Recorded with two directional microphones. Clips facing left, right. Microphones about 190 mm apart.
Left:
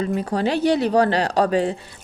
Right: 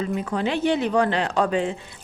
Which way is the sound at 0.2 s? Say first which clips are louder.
Left 3 dB; 35° left (ahead or behind).